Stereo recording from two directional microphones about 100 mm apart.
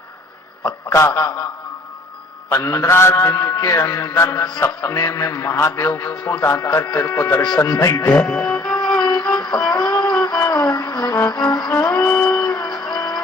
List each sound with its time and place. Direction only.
0.9 s a man's voice: 25° left (ahead or behind)
1.1 s a man's voice: 40° left (ahead or behind)
2.5 s a man's voice: 30° left (ahead or behind)
7.4 s a man's voice: 40° left (ahead or behind)
8.1 s speech: 10° left (ahead or behind)
8.8 s music: 5° left (ahead or behind)
9.4 s music: 45° left (ahead or behind)
10.5 s insect: 45° left (ahead or behind)
11.3 s music: 45° left (ahead or behind)
11.8 s music: 10° left (ahead or behind)
12.5 s music: 45° left (ahead or behind)